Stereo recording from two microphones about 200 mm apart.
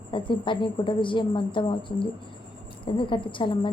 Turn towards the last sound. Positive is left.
turn(degrees=25)  # may be behind; listen again after turning